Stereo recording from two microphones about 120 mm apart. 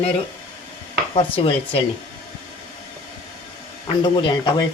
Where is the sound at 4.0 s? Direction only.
40° left (ahead or behind).